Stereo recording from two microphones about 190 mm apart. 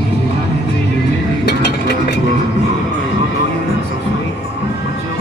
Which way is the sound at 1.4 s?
60° left (ahead or behind).